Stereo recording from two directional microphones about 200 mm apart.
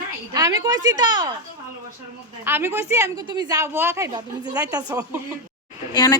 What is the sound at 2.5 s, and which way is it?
A woman's voice, 10° right (ahead or behind).